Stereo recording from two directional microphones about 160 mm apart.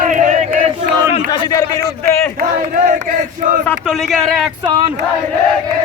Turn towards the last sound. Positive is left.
turn(degrees=0)  # may be behind; listen again after turning